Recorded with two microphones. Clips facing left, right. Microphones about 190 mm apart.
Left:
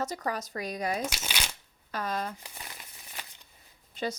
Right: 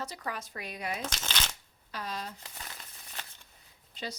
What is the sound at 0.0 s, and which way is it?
A woman's voice, 45° left (ahead or behind).